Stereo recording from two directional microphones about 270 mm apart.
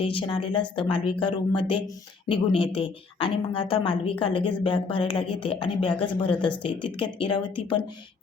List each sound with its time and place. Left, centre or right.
0.0 s a woman's voice: centre